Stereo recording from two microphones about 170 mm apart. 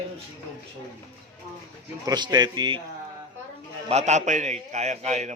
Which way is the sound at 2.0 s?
25° right (ahead or behind).